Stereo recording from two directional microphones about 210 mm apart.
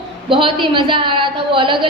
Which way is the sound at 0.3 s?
25° right (ahead or behind).